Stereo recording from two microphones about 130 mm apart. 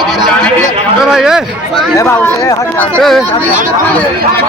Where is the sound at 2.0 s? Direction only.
20° left (ahead or behind).